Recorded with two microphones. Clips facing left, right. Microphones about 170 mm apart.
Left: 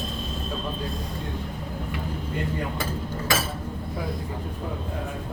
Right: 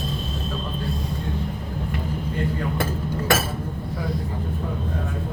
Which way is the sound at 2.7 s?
55° right (ahead or behind).